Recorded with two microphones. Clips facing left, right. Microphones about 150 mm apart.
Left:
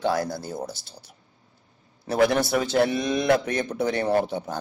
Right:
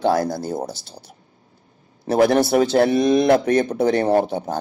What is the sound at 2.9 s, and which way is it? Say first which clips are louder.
Speech: right 9 dB; 55° right (ahead or behind).